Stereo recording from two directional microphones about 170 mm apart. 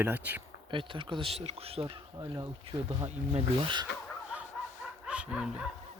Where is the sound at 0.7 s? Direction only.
30° right (ahead or behind).